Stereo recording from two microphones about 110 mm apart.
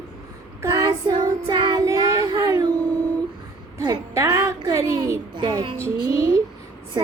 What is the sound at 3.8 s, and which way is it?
Music, 25° right (ahead or behind).